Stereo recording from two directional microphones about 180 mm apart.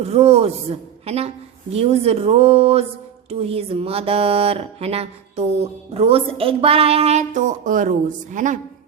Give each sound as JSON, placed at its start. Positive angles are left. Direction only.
{"t": 0.0, "sound": "a woman's voice", "side_deg": -35}